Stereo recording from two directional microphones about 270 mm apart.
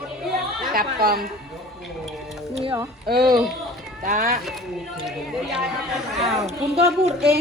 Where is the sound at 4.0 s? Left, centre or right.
Right.